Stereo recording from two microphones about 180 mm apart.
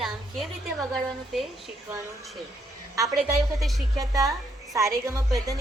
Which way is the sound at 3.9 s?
20° right (ahead or behind).